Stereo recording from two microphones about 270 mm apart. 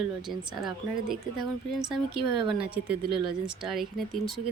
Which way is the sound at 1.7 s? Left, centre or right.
Centre.